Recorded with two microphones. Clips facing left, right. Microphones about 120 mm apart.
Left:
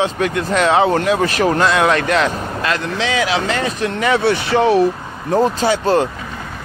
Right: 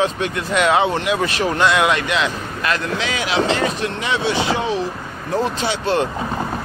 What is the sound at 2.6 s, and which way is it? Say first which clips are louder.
Speech: left 1 dB; 30° left (ahead or behind).